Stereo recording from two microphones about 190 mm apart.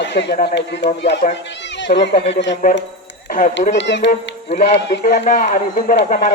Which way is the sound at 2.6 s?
50° left (ahead or behind).